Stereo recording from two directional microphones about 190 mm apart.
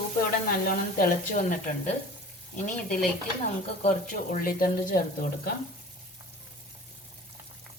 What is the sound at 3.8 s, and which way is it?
Speech, 45° left (ahead or behind).